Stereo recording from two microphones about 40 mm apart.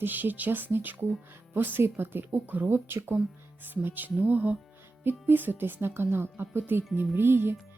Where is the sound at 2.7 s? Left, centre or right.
Right.